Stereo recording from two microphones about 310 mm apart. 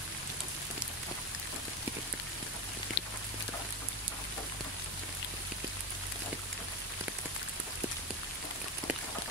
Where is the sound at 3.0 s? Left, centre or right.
Left.